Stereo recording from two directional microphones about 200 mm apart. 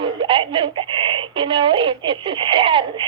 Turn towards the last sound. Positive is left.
turn(degrees=-25)  # may be behind; listen again after turning